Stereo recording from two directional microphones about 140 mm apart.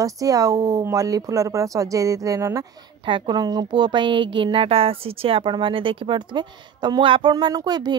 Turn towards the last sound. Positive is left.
turn(degrees=-30)  # may be behind; listen again after turning